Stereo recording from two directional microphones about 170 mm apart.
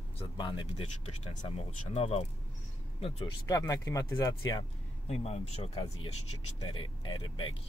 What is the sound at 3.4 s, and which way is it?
Speech, 20° left (ahead or behind).